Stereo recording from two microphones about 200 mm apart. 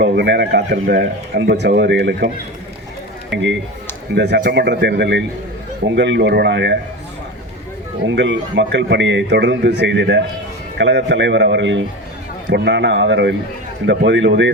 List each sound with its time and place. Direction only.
0.0 s speech: 60° right (ahead or behind)
8.0 s speech: 65° right (ahead or behind)